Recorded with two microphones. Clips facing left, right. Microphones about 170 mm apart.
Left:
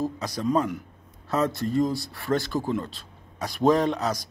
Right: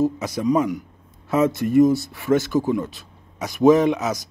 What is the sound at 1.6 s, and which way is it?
Speech, 15° right (ahead or behind).